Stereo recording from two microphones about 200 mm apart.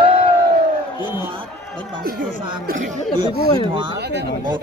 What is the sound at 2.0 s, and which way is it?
Speech, 50° right (ahead or behind).